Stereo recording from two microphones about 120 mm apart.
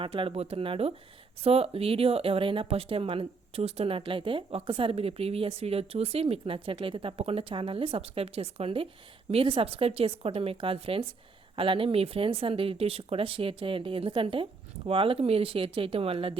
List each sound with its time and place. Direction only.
0.0 s speech: 50° right (ahead or behind)